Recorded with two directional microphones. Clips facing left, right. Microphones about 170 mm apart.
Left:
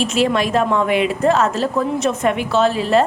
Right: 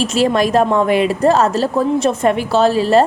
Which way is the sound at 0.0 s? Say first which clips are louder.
Right 3 dB; 35° right (ahead or behind).